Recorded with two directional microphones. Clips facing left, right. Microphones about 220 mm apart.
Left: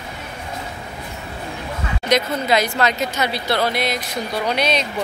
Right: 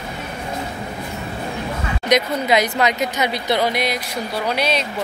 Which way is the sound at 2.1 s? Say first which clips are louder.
Right 1 dB; 15° right (ahead or behind).